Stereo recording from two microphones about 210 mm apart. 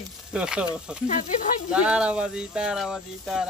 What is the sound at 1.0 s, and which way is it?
Speech, 35° left (ahead or behind).